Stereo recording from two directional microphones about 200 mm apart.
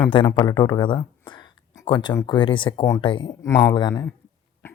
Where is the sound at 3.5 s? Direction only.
10° left (ahead or behind).